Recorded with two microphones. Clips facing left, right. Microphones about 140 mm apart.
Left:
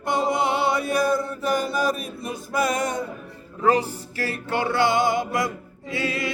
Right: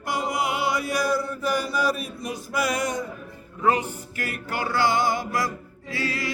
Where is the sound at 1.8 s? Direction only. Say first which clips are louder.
Left 1 dB; 45° left (ahead or behind).